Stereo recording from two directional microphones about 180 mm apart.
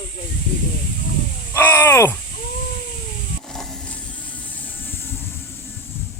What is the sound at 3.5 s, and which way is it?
Vehicle, centre (ahead or behind).